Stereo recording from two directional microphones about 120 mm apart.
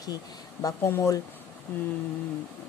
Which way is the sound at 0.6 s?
25° left (ahead or behind).